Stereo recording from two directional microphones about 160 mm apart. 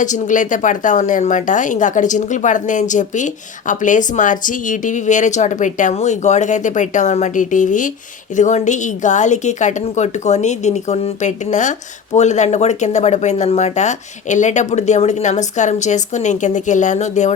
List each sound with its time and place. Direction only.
0.0 s speech: 50° left (ahead or behind)